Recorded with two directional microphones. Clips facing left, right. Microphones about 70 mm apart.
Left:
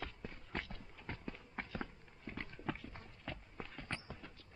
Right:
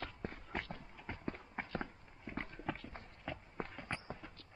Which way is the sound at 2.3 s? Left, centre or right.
Centre.